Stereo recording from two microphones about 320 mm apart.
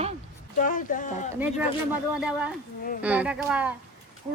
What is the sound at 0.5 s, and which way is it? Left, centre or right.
Speech, left.